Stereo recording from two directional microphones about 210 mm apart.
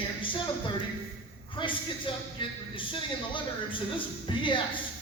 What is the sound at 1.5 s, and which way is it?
A man's voice, 25° left (ahead or behind).